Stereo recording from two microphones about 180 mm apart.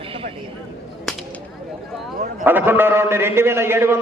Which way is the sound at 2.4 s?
10° right (ahead or behind).